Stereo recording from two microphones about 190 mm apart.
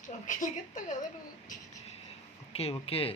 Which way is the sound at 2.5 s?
30° left (ahead or behind).